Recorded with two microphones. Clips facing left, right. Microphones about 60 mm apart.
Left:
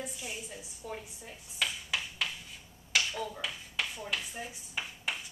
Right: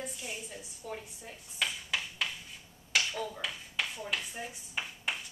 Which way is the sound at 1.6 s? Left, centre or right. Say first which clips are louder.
Even; right.